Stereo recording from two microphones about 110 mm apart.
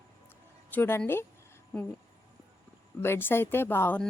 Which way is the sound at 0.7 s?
20° left (ahead or behind).